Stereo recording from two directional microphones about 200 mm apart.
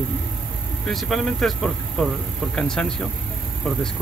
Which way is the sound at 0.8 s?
Centre (ahead or behind).